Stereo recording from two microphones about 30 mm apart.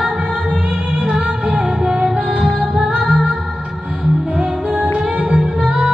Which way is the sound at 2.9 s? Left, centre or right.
Centre.